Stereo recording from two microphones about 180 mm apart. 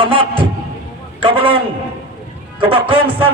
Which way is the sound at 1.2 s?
30° right (ahead or behind).